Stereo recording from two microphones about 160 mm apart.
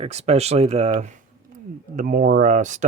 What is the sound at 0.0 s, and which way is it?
Speech, 40° right (ahead or behind).